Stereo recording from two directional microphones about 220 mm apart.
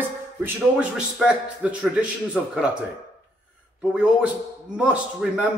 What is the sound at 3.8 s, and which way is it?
A man's voice, 5° right (ahead or behind).